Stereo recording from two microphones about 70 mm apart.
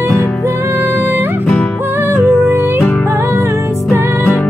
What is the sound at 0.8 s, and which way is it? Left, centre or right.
Music, right.